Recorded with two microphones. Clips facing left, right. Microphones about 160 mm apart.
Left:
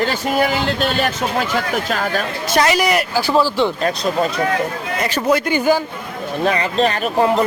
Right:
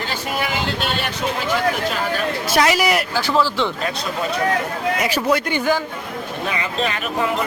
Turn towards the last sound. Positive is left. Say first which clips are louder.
# left 6 dB
turn(degrees=35)  # may be behind; listen again after turning